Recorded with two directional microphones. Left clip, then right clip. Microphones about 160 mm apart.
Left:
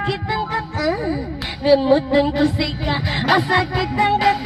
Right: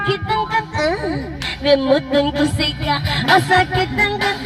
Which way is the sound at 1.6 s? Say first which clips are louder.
Even; 25° left (ahead or behind).